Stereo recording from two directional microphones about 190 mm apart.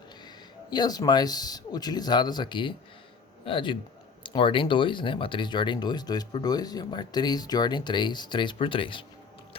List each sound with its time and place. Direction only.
0.7 s speech: 20° left (ahead or behind)